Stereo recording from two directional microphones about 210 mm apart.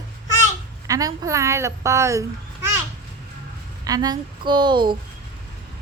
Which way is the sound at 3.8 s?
20° right (ahead or behind).